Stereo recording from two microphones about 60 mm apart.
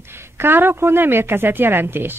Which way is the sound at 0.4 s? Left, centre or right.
Right.